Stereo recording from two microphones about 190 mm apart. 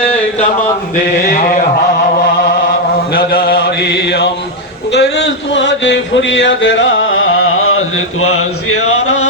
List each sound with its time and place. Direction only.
3.1 s mantra: 50° left (ahead or behind)
4.9 s speech: 60° left (ahead or behind); by 8.4 s 90° left